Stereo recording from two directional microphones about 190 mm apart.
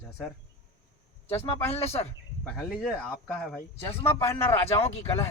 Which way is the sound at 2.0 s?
10° left (ahead or behind).